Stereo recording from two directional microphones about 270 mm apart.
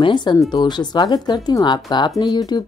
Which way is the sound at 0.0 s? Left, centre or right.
Centre.